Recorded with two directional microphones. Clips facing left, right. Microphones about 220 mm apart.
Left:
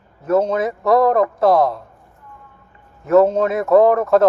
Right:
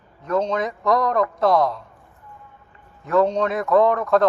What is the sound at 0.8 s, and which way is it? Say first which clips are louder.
Speech: left 6 dB; 30° left (ahead or behind).